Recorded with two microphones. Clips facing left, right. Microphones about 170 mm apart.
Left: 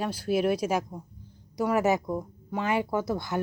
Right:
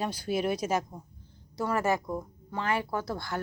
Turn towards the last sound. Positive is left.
turn(degrees=20)  # may be behind; listen again after turning